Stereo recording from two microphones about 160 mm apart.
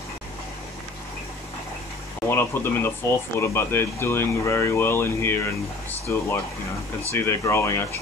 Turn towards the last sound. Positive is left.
turn(degrees=15)  # may be behind; listen again after turning